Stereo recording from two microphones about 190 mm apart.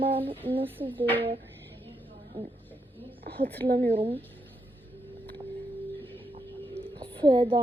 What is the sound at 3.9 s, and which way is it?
Speech, 30° right (ahead or behind).